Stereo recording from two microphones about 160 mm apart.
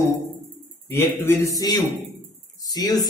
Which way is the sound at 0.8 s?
15° left (ahead or behind).